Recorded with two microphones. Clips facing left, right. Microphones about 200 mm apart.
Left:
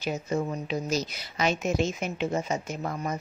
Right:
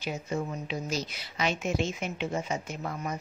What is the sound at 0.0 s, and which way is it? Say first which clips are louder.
Speech: left 4 dB; 40° left (ahead or behind).